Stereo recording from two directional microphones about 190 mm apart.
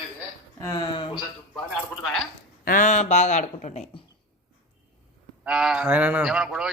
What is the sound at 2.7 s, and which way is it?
Speech, 40° left (ahead or behind).